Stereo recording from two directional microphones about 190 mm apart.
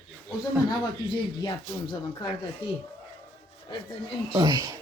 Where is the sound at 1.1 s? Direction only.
25° left (ahead or behind).